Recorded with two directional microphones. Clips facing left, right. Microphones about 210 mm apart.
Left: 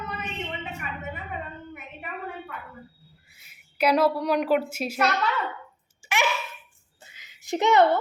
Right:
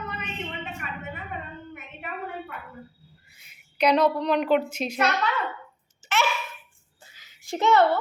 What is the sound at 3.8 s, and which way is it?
Speech, 5° left (ahead or behind).